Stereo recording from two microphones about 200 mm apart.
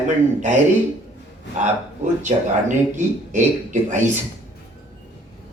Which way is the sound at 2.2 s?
40° right (ahead or behind).